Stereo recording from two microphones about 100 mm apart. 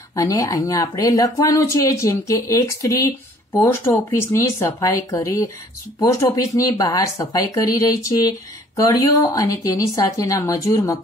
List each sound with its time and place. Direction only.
0.1 s speech: 35° left (ahead or behind)